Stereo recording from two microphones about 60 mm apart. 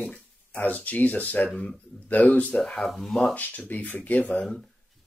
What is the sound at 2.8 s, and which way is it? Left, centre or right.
Speech, centre.